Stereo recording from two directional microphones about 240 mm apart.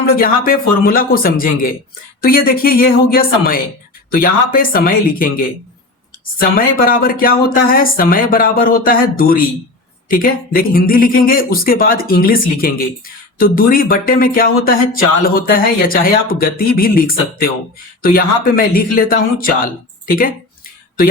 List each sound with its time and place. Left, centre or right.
0.0 s speech: left